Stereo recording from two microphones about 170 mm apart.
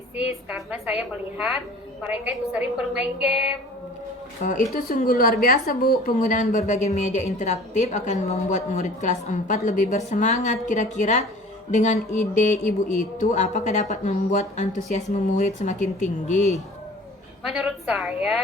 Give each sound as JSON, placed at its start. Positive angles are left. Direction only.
{"t": 0.4, "sound": "a woman's voice", "side_deg": -5}
{"t": 4.9, "sound": "a woman's voice", "side_deg": 55}
{"t": 17.4, "sound": "a woman's voice", "side_deg": -5}